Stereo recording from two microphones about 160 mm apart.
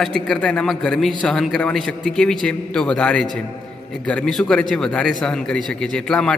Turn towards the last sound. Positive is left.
turn(degrees=5)  # may be behind; listen again after turning